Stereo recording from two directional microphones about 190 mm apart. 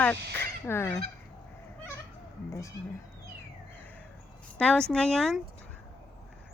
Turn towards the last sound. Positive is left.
turn(degrees=0)  # may be behind; listen again after turning